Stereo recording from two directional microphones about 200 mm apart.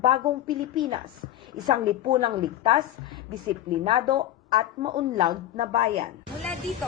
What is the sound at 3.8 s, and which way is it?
A woman's voice, 25° right (ahead or behind).